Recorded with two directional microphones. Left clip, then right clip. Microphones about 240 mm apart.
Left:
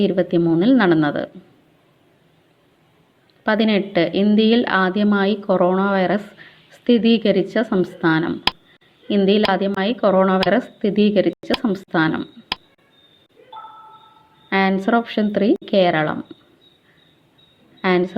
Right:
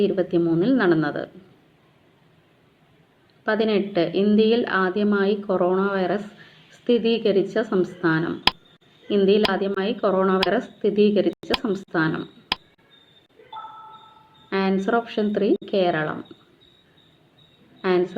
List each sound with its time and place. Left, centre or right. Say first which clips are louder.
0.0 s a woman's voice: left 3 dB; left
3.4 s a woman's voice: left 3 dB; left
13.5 s a sound: even; centre
14.5 s a woman's voice: left 4 dB; left
17.8 s a woman's voice: left 3 dB; left